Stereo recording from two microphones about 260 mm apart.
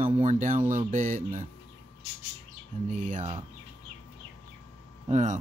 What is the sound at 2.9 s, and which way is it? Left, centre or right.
Speech, right.